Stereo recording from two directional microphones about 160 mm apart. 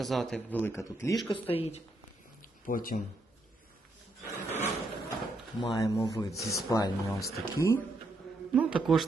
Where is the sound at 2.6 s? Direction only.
60° left (ahead or behind).